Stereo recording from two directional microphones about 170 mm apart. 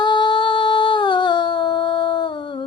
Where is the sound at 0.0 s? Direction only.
25° left (ahead or behind).